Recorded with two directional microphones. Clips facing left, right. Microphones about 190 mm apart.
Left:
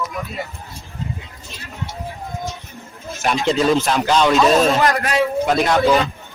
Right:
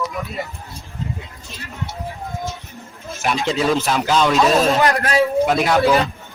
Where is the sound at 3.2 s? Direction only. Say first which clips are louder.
Left 2 dB; centre (ahead or behind).